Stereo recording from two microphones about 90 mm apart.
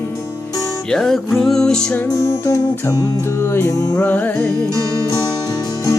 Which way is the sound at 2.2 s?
35° left (ahead or behind).